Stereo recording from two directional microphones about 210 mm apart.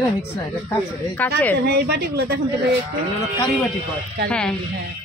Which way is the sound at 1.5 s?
50° right (ahead or behind).